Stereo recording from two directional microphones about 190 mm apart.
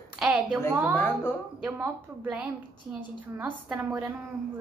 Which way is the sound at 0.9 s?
10° left (ahead or behind).